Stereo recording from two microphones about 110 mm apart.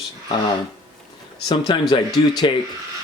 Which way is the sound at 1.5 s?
45° left (ahead or behind).